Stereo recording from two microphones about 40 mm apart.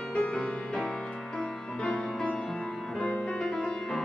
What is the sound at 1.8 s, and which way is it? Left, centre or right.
Music, left.